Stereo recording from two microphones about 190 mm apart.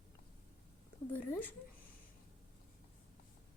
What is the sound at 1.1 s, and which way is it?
Speech, 10° left (ahead or behind).